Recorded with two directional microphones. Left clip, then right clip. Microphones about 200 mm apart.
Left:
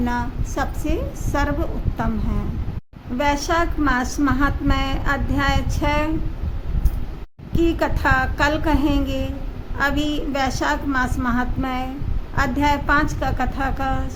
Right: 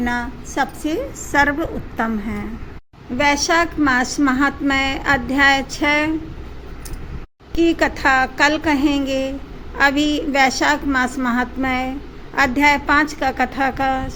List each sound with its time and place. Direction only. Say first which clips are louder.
0.0 s a woman's voice: right 2 dB; 15° right (ahead or behind)
3.2 s a woman's voice: right 4 dB; 15° right (ahead or behind)
7.5 s a woman's voice: right 4 dB; 10° right (ahead or behind)